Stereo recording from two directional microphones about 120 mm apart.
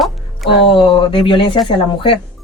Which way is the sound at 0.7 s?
45° left (ahead or behind).